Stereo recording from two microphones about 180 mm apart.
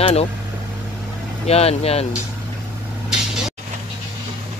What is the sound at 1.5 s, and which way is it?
Speech, 35° left (ahead or behind).